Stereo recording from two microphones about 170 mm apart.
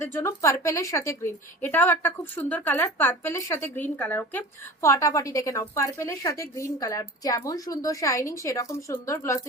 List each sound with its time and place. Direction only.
0.0 s a woman's voice: 15° left (ahead or behind)